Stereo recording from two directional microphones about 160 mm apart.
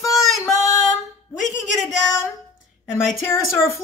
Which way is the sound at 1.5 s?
50° left (ahead or behind).